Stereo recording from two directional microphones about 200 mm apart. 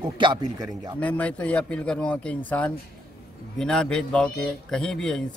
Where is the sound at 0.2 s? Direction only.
20° right (ahead or behind).